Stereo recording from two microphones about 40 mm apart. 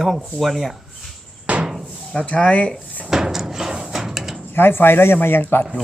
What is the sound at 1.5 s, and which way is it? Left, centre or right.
Hammer, right.